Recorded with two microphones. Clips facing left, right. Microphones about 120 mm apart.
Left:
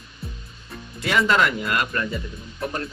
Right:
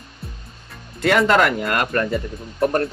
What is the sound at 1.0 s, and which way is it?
Speech, 55° right (ahead or behind).